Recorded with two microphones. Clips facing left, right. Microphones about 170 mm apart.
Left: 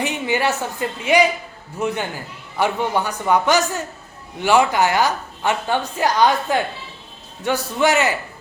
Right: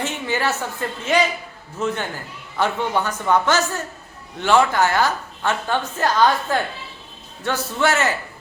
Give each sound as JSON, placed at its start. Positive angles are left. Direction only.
{"t": 0.0, "sound": "a woman's voice", "side_deg": 15}